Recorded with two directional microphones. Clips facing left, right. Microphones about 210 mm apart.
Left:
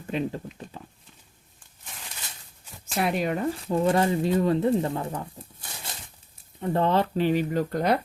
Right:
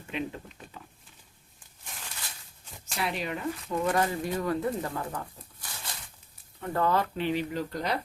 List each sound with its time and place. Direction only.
0.1 s speech: 35° left (ahead or behind)
3.0 s speech: 50° left (ahead or behind)
3.5 s speech: 30° left (ahead or behind); by 7.9 s 55° left (ahead or behind)